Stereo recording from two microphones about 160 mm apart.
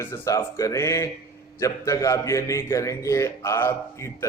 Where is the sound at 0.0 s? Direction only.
20° left (ahead or behind).